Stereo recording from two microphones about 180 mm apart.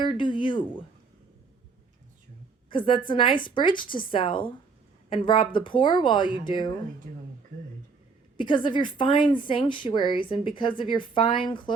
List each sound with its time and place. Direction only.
0.0 s a woman's voice: 25° left (ahead or behind)
2.6 s a woman's voice: 25° left (ahead or behind)
8.4 s a woman's voice: 25° left (ahead or behind)